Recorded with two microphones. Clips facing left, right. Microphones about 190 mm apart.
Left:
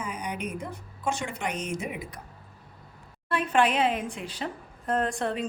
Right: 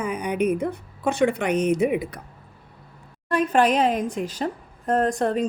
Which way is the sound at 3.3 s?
40° right (ahead or behind).